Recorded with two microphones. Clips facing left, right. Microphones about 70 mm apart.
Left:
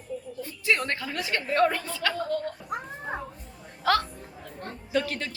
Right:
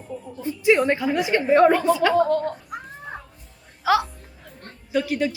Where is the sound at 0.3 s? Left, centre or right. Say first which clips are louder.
Right 9 dB; centre.